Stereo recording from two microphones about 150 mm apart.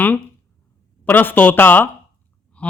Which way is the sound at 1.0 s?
15° left (ahead or behind).